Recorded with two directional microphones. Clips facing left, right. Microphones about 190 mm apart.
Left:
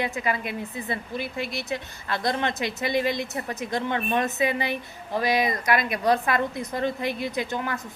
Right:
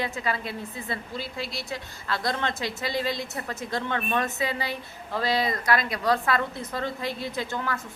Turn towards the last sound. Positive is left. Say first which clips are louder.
# left 2 dB
turn(degrees=20)  # may be behind; listen again after turning